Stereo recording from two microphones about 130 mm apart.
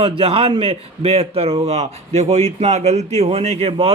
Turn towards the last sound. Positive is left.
turn(degrees=-50)  # may be behind; listen again after turning